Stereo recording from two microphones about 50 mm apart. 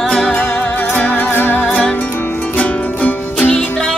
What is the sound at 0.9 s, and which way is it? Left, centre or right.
Music, left.